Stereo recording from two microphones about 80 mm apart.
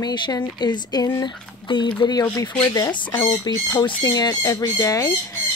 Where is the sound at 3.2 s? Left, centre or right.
Left.